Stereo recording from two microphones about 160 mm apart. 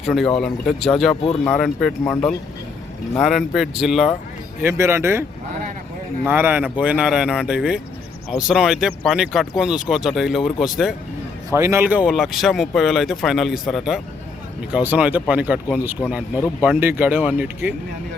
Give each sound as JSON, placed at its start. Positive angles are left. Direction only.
{"t": 0.0, "sound": "speech", "side_deg": 0}
{"t": 1.1, "sound": "speech", "side_deg": 35}
{"t": 1.5, "sound": "speech", "side_deg": 5}
{"t": 4.6, "sound": "speech", "side_deg": -15}
{"t": 6.2, "sound": "speech", "side_deg": -10}
{"t": 11.5, "sound": "speech", "side_deg": -15}